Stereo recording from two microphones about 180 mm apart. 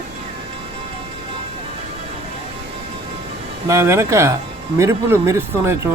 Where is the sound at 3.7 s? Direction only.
15° right (ahead or behind).